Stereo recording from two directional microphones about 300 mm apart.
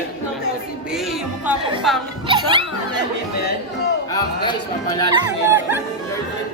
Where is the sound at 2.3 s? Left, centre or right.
Centre.